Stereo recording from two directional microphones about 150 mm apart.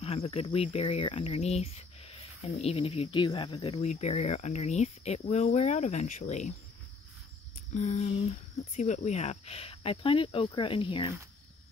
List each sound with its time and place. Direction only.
0.0 s speech: 40° left (ahead or behind)
7.7 s speech: 50° left (ahead or behind); by 11.1 s 35° left (ahead or behind)